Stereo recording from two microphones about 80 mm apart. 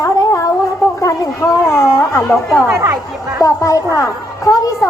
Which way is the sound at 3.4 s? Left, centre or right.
Left.